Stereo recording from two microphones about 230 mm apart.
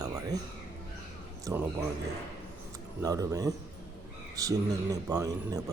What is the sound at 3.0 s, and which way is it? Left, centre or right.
Speech, centre.